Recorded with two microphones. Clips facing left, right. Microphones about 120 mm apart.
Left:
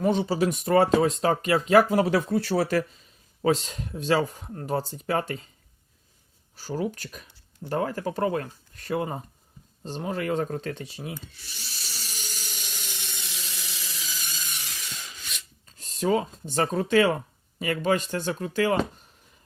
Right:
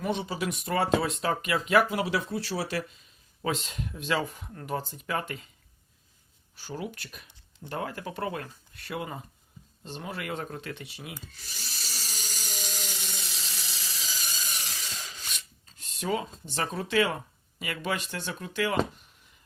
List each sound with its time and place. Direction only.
0.0 s speech: 35° left (ahead or behind)
0.6 s speech: 50° left (ahead or behind)
3.4 s speech: 35° left (ahead or behind)
6.6 s speech: 40° left (ahead or behind)
11.3 s tools: 40° right (ahead or behind)
14.3 s a sound: 35° right (ahead or behind)
15.8 s speech: 40° left (ahead or behind)